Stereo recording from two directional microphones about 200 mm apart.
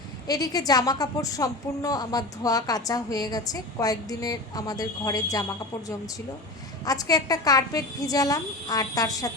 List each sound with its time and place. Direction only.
0.3 s a woman's voice: 20° left (ahead or behind)
6.8 s a woman's voice: 20° left (ahead or behind)